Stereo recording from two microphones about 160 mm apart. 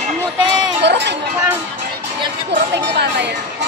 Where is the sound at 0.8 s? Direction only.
90° right.